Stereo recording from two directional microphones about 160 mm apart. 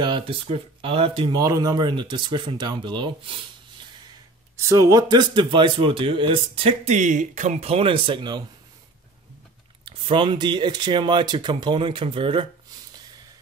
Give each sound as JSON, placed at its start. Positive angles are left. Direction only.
{"t": 0.0, "sound": "speech", "side_deg": -30}
{"t": 4.6, "sound": "a man's voice", "side_deg": -20}
{"t": 9.8, "sound": "speech", "side_deg": -30}